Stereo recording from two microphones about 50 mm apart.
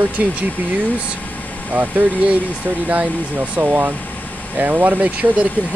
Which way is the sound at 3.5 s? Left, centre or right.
Right.